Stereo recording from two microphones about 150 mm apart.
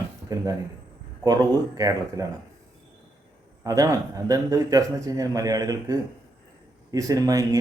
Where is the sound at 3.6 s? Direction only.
25° right (ahead or behind).